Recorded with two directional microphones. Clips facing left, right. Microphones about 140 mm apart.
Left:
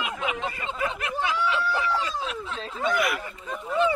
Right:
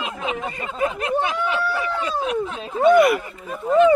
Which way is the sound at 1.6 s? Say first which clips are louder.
Right 2 dB; 60° right (ahead or behind).